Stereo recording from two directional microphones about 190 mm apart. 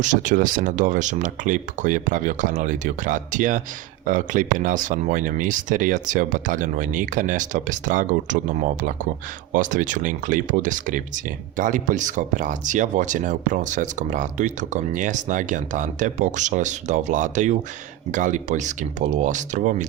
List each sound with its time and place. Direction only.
0.0 s speech: 40° right (ahead or behind)